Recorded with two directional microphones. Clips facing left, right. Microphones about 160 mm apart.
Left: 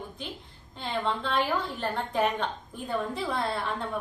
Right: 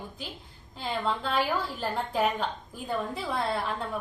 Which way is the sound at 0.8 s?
Centre (ahead or behind).